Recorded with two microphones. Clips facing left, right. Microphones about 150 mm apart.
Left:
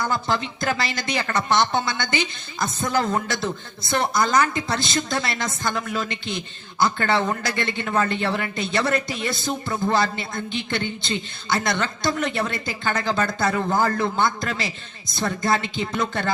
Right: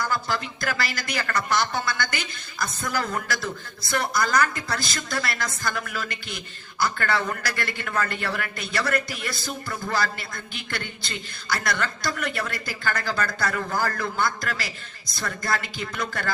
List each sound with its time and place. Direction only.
0.0 s a man's voice: 25° left (ahead or behind)